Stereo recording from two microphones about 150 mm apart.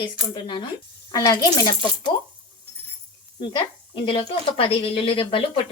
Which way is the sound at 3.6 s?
35° left (ahead or behind).